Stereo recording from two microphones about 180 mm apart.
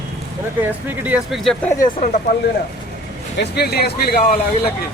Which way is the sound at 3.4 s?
65° left (ahead or behind).